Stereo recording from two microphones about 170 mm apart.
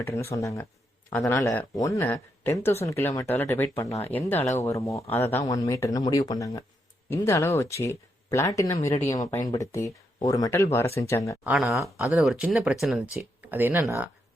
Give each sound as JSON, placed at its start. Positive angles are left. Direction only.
{"t": 0.0, "sound": "speech", "side_deg": 15}
{"t": 11.4, "sound": "speech", "side_deg": -5}